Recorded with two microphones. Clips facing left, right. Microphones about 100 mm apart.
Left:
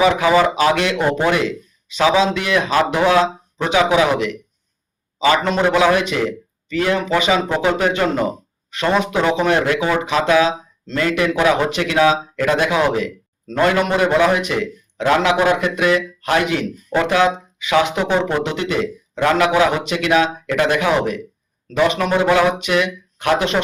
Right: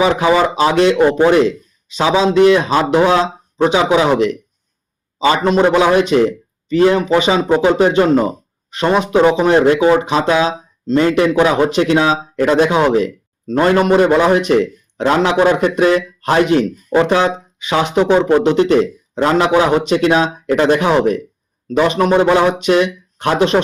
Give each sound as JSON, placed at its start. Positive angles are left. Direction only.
{"t": 0.0, "sound": "a man's voice", "side_deg": -25}